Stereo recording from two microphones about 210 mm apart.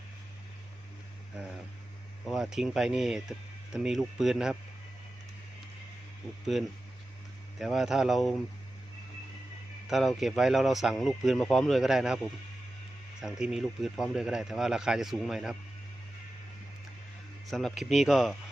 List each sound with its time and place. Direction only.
2.2 s speech: centre (ahead or behind)
6.5 s speech: centre (ahead or behind)
9.9 s speech: centre (ahead or behind)
13.2 s speech: centre (ahead or behind)
17.5 s speech: centre (ahead or behind)